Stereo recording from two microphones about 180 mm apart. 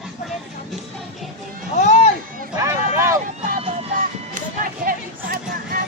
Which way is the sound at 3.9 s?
50° right (ahead or behind).